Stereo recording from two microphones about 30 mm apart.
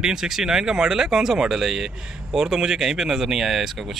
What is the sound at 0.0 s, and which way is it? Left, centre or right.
Speech, centre.